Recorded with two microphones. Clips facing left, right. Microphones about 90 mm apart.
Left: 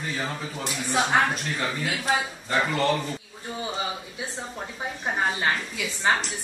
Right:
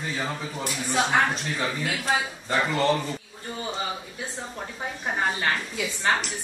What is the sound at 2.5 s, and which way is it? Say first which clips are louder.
Speech: right 1 dB; 20° right (ahead or behind).